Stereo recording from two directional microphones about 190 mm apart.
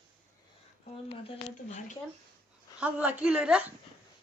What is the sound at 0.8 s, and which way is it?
Speech, 40° left (ahead or behind).